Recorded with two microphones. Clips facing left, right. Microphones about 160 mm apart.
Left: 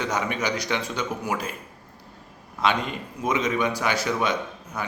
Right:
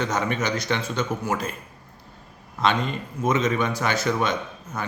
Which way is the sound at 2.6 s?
10° left (ahead or behind).